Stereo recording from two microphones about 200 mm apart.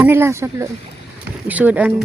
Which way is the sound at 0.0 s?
10° right (ahead or behind).